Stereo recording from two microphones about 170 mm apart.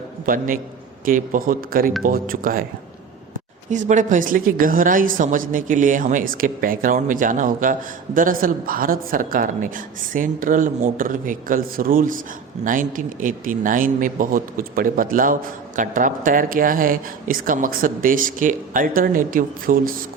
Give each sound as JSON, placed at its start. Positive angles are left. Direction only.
{"t": 0.3, "sound": "a man's voice", "side_deg": -55}
{"t": 3.7, "sound": "a woman's voice", "side_deg": -45}